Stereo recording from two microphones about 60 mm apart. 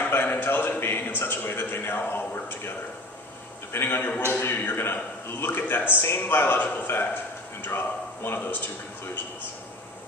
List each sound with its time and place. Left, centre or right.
0.1 s a man's voice: left
2.0 s a sound: left
3.7 s a man's voice: left